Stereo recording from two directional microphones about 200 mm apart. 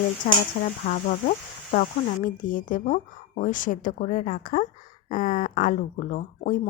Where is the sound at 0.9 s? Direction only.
45° left (ahead or behind).